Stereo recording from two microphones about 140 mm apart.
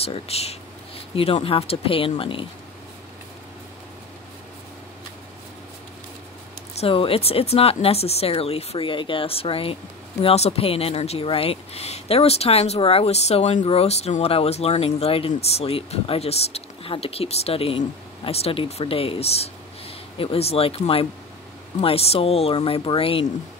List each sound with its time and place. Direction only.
0.0 s speech: 45° left (ahead or behind)
6.8 s speech: 40° left (ahead or behind)